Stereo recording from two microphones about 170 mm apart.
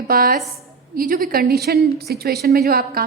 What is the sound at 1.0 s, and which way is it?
A woman's voice, 55° right (ahead or behind).